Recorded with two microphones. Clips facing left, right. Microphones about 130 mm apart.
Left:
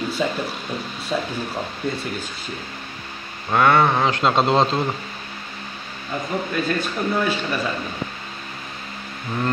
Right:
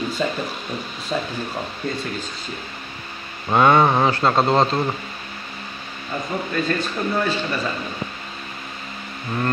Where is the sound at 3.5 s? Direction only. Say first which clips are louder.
Right 1 dB; 15° right (ahead or behind).